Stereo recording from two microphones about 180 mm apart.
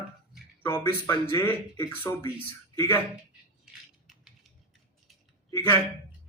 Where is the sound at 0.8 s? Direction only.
15° left (ahead or behind).